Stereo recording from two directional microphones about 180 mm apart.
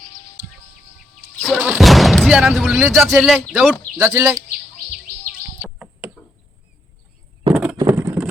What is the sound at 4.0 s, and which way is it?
Speech, 15° right (ahead or behind).